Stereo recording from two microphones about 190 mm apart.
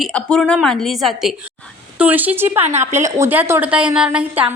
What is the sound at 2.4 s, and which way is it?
Speech, 35° right (ahead or behind).